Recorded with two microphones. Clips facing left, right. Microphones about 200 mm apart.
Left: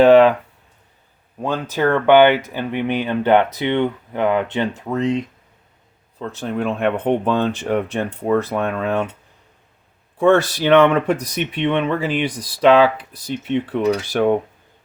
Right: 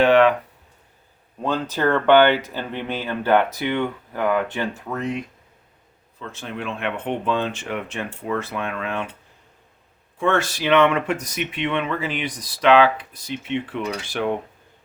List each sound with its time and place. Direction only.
0.0 s a sound: 35° left (ahead or behind)
1.4 s speech: 10° left (ahead or behind)
6.1 s speech: 35° left (ahead or behind)
10.2 s speech: 35° left (ahead or behind)